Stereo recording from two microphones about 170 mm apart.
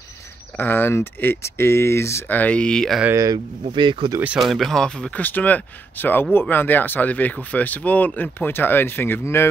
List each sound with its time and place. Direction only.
0.6 s speech: 10° left (ahead or behind)
3.0 s speech: 15° right (ahead or behind)
4.2 s speech: 5° right (ahead or behind); by 9.5 s 15° left (ahead or behind)